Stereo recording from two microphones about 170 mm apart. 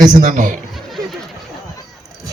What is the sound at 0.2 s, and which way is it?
Speech, 50° right (ahead or behind).